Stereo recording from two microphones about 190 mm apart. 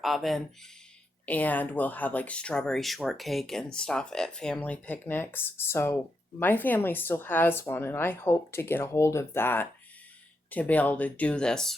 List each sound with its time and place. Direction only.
0.0 s a woman's voice: centre (ahead or behind)